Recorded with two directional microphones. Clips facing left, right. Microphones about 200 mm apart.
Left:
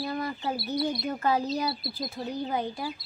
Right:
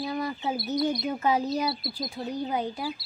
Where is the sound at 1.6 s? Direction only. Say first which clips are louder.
Right 1 dB; centre (ahead or behind).